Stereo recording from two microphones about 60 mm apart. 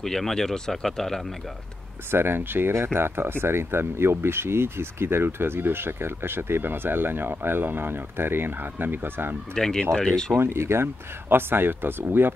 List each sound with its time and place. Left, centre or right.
0.0 s speech: centre
2.0 s speech: right
9.5 s speech: centre
10.3 s speech: right